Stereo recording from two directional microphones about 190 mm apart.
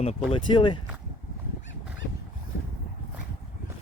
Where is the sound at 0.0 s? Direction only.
30° left (ahead or behind).